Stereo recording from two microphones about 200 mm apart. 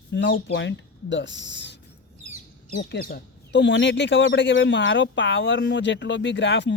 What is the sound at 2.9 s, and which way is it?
Speech, 50° left (ahead or behind).